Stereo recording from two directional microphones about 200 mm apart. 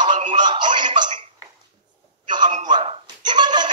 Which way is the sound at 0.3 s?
20° right (ahead or behind).